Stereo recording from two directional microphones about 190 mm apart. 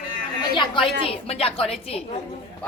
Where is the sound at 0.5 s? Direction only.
25° left (ahead or behind).